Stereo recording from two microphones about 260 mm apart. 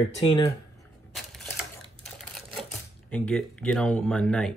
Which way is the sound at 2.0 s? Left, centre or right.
Centre.